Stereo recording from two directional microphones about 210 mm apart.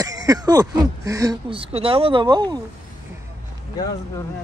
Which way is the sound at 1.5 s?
25° right (ahead or behind).